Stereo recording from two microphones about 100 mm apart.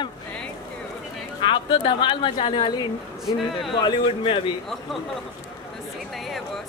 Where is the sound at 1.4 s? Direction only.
55° left (ahead or behind).